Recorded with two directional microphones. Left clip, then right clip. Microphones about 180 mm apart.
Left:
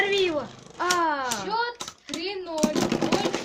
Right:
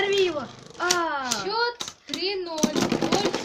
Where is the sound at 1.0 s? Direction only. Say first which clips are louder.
Left 2 dB; 45° left (ahead or behind).